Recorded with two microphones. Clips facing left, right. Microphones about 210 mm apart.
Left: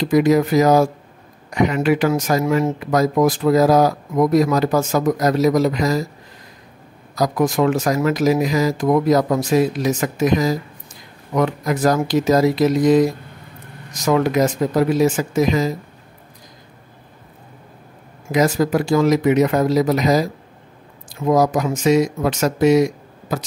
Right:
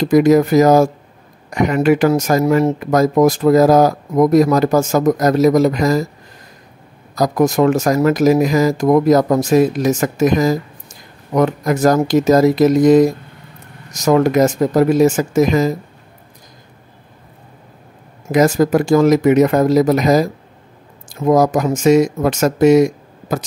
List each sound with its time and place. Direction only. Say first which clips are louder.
0.0 s speech: right 4 dB; 45° right (ahead or behind)
7.2 s speech: right 4 dB; 45° right (ahead or behind)
18.3 s speech: right 4 dB; 45° right (ahead or behind)